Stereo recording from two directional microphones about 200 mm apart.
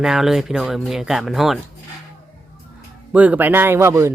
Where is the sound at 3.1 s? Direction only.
5° right (ahead or behind).